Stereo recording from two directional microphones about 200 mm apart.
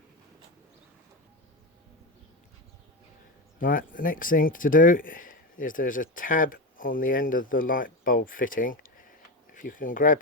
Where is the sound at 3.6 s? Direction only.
45° left (ahead or behind).